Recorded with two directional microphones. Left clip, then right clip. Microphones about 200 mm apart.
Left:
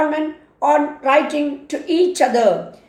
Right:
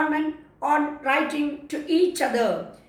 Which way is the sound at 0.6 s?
45° left (ahead or behind).